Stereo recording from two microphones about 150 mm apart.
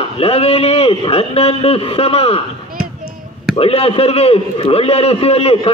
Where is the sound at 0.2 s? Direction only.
40° left (ahead or behind).